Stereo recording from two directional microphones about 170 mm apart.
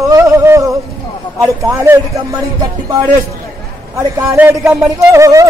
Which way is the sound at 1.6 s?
20° right (ahead or behind).